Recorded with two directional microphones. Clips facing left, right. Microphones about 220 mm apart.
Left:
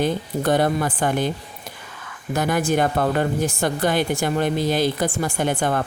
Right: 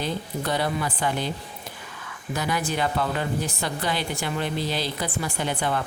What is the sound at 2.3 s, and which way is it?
Speech, 50° left (ahead or behind).